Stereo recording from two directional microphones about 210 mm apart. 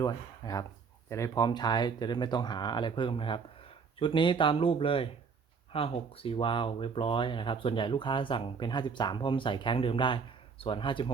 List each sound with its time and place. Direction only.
0.0 s speech: 15° left (ahead or behind)